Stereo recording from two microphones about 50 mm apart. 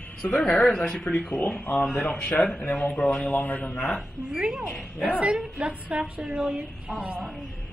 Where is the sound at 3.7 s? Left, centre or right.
Centre.